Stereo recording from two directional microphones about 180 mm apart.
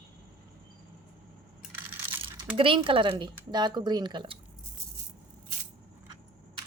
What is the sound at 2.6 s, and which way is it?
Speech, 30° right (ahead or behind).